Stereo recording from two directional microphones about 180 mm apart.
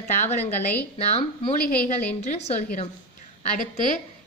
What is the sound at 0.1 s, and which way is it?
A woman's voice, 40° left (ahead or behind).